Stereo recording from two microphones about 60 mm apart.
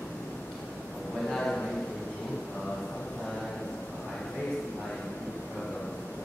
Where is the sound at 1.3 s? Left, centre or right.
Centre.